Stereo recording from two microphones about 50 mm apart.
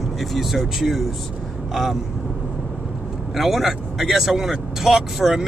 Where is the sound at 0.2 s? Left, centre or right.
Centre.